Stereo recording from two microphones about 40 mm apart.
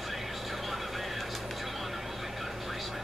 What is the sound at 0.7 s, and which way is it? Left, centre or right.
Vehicle, centre.